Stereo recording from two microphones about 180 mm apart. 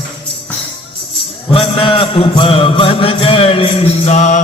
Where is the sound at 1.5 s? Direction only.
30° left (ahead or behind).